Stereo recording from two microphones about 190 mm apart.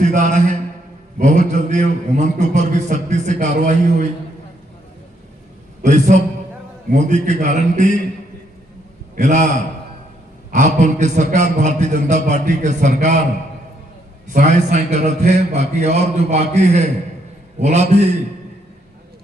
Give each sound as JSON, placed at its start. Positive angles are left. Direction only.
{"t": 0.0, "sound": "a man's voice", "side_deg": -40}
{"t": 5.8, "sound": "a man's voice", "side_deg": -40}
{"t": 9.1, "sound": "a man's voice", "side_deg": -40}
{"t": 10.5, "sound": "a man's voice", "side_deg": -40}
{"t": 14.3, "sound": "a man's voice", "side_deg": -40}